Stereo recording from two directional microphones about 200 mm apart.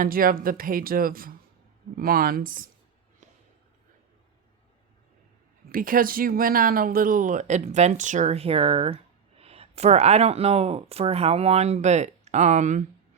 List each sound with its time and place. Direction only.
0.0 s speech: 45° right (ahead or behind)
5.6 s speech: 45° right (ahead or behind)